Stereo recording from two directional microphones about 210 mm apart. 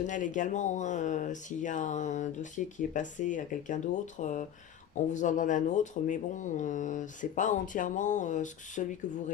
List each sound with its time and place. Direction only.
0.1 s speech: 35° left (ahead or behind)